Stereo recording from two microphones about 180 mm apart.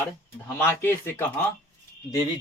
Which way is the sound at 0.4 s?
15° left (ahead or behind).